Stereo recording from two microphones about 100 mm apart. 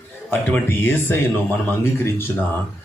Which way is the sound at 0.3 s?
20° left (ahead or behind).